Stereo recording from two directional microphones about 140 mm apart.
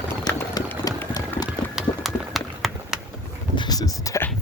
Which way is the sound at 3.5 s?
30° left (ahead or behind).